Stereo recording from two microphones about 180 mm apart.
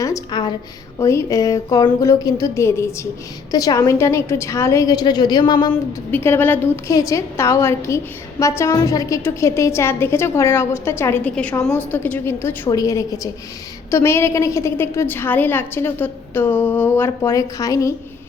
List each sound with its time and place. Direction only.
0.0 s a woman's voice: 20° left (ahead or behind)
6.1 s a woman's voice: 10° left (ahead or behind)